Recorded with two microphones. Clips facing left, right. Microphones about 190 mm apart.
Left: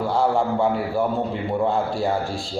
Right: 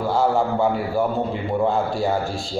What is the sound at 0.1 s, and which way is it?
A man's voice, centre (ahead or behind).